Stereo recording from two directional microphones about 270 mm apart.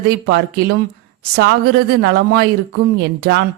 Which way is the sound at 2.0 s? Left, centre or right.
Right.